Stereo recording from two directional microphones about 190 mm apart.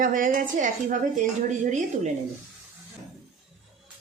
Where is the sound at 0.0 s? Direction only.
45° right (ahead or behind).